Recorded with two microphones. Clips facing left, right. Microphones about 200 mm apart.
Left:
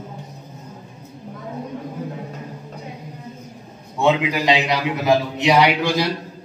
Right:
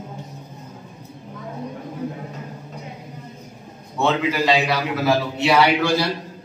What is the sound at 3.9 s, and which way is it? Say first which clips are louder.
A man's voice: left 2 dB; 15° left (ahead or behind).